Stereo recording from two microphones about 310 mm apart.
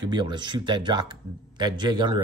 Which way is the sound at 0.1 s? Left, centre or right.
Centre.